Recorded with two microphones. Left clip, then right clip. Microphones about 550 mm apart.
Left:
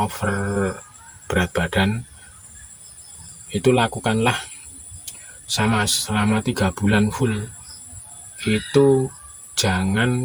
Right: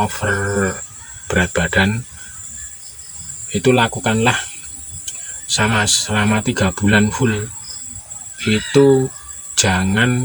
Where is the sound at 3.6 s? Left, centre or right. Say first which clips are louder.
Right 3 dB; left.